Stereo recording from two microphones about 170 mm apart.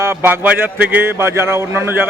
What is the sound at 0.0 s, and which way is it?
A man's voice, 15° right (ahead or behind).